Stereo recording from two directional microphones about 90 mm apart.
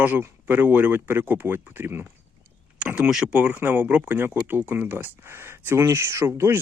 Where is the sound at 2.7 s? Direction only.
10° right (ahead or behind).